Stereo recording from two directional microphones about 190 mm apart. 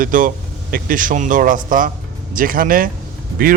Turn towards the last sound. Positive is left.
turn(degrees=-50)  # may be behind; listen again after turning